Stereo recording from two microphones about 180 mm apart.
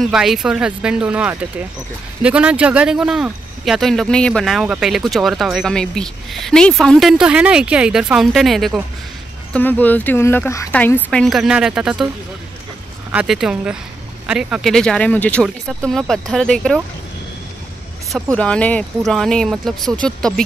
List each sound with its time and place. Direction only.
0.0 s speech: centre (ahead or behind)
13.1 s speech: 5° right (ahead or behind)
18.1 s speech: 5° left (ahead or behind)